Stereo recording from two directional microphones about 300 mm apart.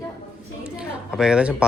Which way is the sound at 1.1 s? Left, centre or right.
Centre.